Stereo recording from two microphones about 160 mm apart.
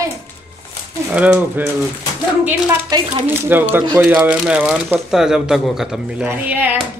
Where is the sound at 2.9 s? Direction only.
25° right (ahead or behind).